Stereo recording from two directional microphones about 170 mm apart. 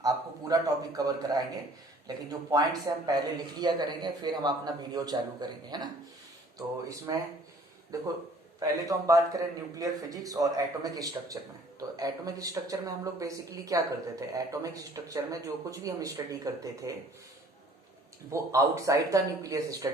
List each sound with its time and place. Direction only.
0.5 s speech: 20° right (ahead or behind)
18.3 s speech: 20° right (ahead or behind)